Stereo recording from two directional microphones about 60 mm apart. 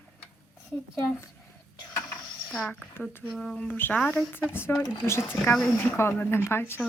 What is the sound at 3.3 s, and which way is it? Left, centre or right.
Speech, centre.